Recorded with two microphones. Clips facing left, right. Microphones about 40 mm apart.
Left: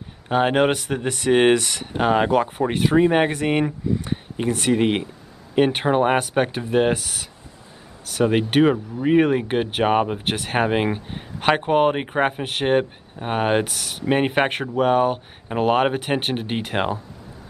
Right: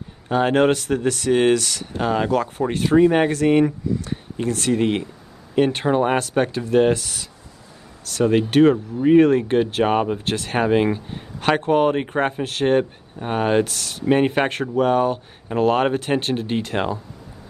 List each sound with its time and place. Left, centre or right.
0.3 s speech: centre